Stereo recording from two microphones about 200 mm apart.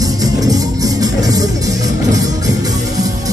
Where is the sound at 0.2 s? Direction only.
20° right (ahead or behind).